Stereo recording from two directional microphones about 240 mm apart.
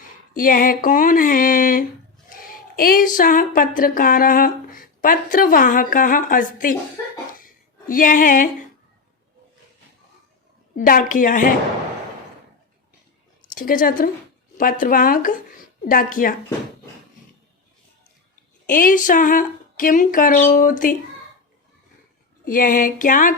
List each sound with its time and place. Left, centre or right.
0.3 s speech: left
7.3 s a sound: left
10.8 s speech: left
13.5 s a woman's voice: left
18.6 s speech: left
22.4 s speech: left